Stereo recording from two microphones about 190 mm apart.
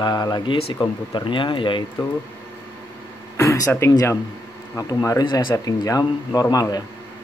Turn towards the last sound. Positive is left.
turn(degrees=15)  # may be behind; listen again after turning